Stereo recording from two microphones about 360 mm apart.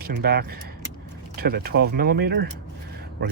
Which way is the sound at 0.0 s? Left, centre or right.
Right.